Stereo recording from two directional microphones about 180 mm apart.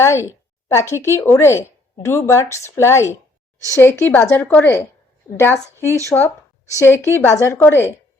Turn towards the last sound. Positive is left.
turn(degrees=10)  # may be behind; listen again after turning